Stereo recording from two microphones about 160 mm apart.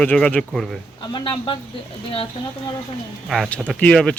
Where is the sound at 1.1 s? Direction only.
30° left (ahead or behind).